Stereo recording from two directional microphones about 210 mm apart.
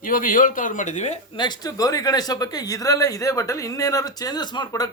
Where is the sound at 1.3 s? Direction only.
20° left (ahead or behind).